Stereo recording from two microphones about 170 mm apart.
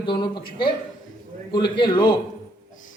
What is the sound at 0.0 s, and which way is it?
A man's voice, 25° left (ahead or behind).